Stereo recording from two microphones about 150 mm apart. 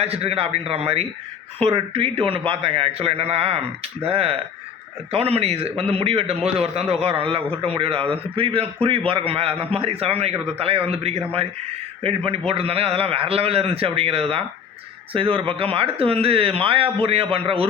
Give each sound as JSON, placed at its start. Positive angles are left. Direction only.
{"t": 0.0, "sound": "a man's voice", "side_deg": -40}